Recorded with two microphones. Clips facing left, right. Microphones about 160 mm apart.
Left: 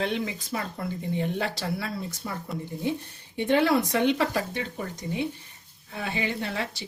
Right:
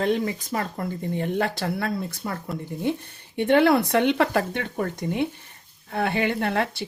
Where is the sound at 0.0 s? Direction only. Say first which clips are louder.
Right 5 dB; 45° right (ahead or behind).